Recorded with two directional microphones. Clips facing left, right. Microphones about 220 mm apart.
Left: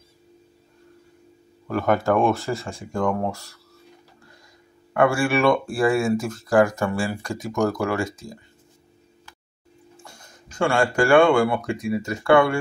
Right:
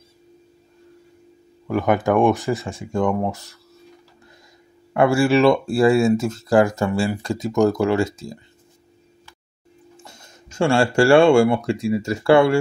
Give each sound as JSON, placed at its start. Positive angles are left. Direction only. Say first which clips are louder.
{"t": 1.7, "sound": "speech", "louder": "right 2 dB", "side_deg": -15}
{"t": 4.9, "sound": "speech", "louder": "right 4 dB", "side_deg": -25}
{"t": 10.0, "sound": "speech", "louder": "right 1 dB", "side_deg": -25}